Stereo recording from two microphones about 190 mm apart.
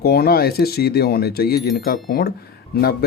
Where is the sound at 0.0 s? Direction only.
55° left (ahead or behind).